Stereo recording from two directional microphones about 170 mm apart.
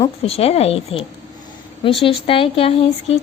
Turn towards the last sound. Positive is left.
turn(degrees=35)  # may be behind; listen again after turning